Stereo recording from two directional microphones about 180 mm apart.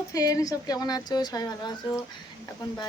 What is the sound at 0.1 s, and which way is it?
Speech, 20° left (ahead or behind).